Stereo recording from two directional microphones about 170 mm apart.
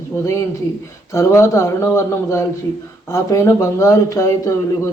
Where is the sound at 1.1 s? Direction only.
15° left (ahead or behind).